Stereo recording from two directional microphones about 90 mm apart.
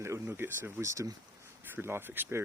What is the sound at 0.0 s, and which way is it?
Speech, 25° right (ahead or behind).